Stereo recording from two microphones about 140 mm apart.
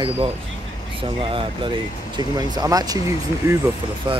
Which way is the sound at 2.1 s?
25° right (ahead or behind).